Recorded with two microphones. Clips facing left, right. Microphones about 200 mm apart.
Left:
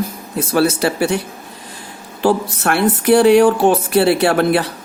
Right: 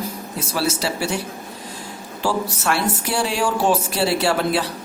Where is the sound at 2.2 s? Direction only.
60° left (ahead or behind).